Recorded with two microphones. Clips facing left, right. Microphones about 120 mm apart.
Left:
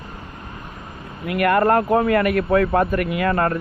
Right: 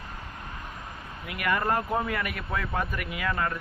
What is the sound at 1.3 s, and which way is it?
Speech, 60° left (ahead or behind).